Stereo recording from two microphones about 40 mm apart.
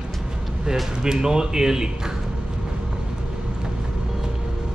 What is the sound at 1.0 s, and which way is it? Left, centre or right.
Speech, centre.